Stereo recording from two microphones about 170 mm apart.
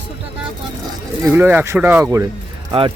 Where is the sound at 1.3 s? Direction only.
10° right (ahead or behind).